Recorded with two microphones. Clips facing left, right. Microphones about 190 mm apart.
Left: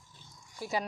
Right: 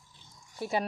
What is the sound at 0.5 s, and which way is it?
Speech, 25° right (ahead or behind).